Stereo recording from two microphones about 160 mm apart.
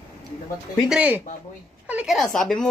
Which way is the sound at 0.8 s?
5° right (ahead or behind).